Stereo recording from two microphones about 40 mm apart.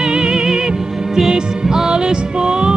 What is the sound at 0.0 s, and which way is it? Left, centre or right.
Music, centre.